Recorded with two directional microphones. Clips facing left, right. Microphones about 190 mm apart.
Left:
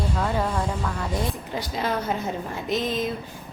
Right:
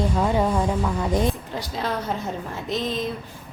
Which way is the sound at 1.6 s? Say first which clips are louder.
Left 1 dB; centre (ahead or behind).